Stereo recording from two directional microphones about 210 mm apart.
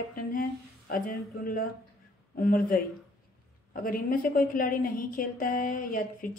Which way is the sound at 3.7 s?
45° left (ahead or behind).